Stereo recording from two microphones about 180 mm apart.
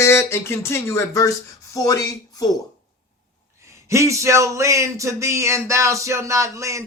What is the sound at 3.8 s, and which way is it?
Speech, 15° right (ahead or behind).